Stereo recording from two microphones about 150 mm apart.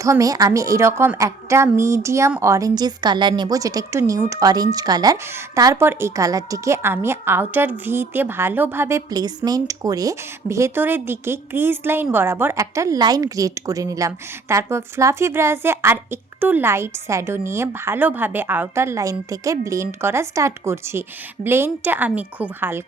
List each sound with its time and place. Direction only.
0.0 s a woman's voice: 20° right (ahead or behind)